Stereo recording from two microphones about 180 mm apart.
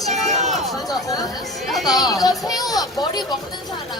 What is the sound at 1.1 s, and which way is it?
A woman's voice, 20° left (ahead or behind).